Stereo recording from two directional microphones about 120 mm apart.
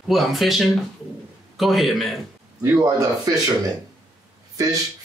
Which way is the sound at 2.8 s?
30° right (ahead or behind).